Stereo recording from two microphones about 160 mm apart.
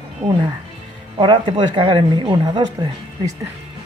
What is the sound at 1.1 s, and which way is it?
Speech, 30° right (ahead or behind).